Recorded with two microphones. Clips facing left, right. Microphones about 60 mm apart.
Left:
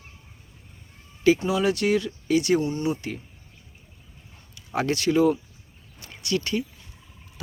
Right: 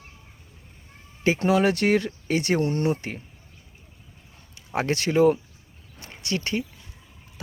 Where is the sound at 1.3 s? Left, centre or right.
Right.